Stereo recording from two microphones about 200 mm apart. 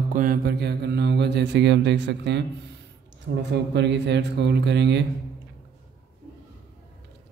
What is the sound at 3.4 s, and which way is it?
Speech, 60° right (ahead or behind).